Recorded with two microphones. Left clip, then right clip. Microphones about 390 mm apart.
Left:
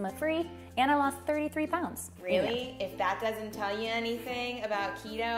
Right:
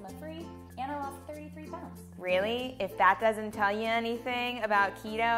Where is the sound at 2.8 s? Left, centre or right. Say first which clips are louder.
Right 8 dB; right.